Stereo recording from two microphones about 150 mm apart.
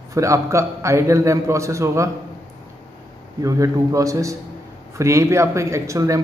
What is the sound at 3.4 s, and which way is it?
A man's voice, 20° right (ahead or behind).